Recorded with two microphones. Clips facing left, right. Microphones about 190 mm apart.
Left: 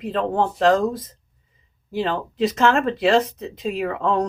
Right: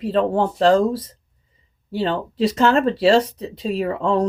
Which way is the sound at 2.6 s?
30° right (ahead or behind).